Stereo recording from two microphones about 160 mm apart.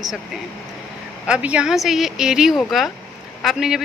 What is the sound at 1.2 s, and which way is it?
Speech, 5° right (ahead or behind).